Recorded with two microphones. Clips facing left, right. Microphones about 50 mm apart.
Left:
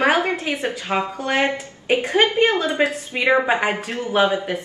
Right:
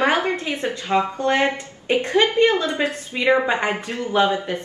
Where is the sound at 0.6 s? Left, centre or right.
Centre.